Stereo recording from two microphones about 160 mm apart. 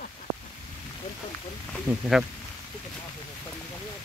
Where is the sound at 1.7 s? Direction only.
Centre (ahead or behind).